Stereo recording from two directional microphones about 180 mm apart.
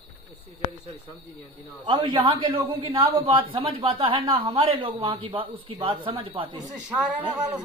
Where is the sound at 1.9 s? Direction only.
25° right (ahead or behind).